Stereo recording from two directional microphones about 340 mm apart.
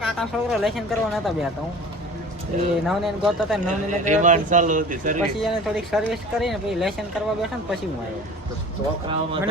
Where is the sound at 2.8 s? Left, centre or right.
Centre.